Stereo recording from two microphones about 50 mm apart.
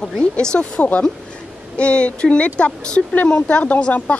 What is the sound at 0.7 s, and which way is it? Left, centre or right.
Speech, left.